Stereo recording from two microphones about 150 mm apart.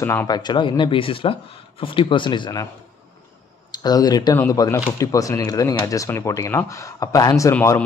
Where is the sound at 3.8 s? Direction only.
25° left (ahead or behind).